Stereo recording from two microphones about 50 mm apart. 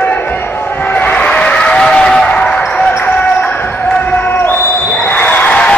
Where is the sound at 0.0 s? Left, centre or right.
Left.